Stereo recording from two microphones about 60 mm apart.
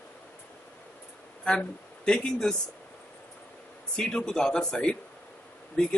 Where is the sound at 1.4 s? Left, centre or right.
Centre.